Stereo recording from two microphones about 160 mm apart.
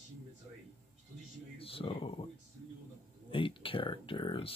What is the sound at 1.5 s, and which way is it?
Speech, 35° left (ahead or behind).